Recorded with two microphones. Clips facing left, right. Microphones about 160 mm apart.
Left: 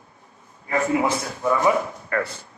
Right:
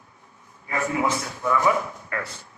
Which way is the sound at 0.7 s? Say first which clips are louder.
Left 3 dB; 20° left (ahead or behind).